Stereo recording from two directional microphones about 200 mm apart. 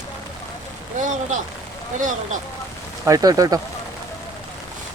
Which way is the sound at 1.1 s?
40° right (ahead or behind).